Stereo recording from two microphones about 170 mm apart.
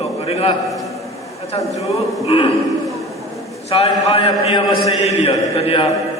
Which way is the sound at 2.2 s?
35° left (ahead or behind).